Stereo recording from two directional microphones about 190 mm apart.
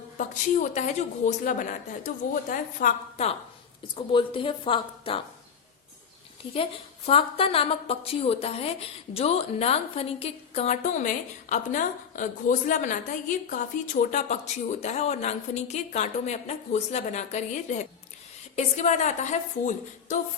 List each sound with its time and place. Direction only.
0.2 s a woman's voice: 40° left (ahead or behind)
3.9 s a woman's voice: 25° left (ahead or behind)
6.5 s a woman's voice: 30° left (ahead or behind)